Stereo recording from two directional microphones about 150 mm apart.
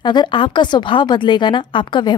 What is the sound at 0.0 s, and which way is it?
A woman's voice, 30° left (ahead or behind).